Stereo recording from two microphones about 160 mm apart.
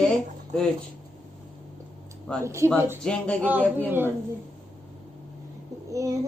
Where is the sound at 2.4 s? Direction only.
15° right (ahead or behind).